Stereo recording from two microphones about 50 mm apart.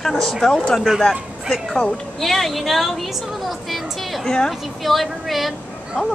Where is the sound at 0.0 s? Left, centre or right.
Centre.